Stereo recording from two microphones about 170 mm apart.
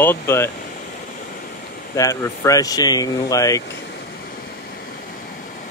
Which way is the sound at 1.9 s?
20° left (ahead or behind).